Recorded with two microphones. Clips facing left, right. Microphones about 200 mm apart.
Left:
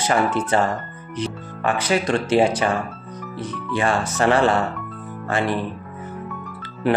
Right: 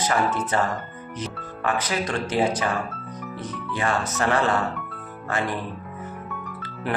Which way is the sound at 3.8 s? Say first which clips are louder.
Left 4 dB; 30° left (ahead or behind).